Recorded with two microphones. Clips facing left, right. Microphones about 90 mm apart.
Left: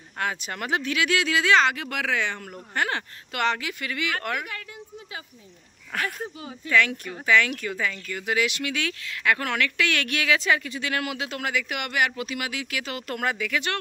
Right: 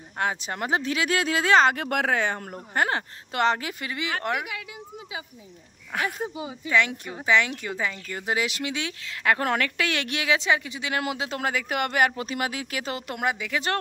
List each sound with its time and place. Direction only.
0.2 s speech: 25° right (ahead or behind)
4.4 s speech: 10° right (ahead or behind)
5.9 s speech: 15° right (ahead or behind); by 13.0 s 35° right (ahead or behind)
13.0 s speech: 15° right (ahead or behind)